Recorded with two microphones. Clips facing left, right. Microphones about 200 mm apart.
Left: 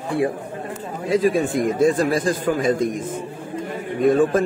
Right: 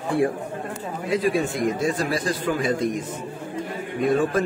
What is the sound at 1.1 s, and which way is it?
A man's voice, 50° left (ahead or behind).